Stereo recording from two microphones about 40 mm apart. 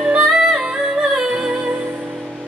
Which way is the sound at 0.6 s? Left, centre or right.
Centre.